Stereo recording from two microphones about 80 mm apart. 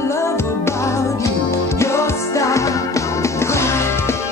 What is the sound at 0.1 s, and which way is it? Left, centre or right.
Music, left.